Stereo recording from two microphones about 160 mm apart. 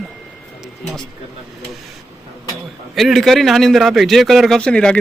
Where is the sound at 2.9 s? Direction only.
Centre (ahead or behind).